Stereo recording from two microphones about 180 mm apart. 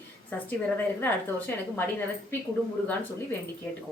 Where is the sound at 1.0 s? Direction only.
10° left (ahead or behind).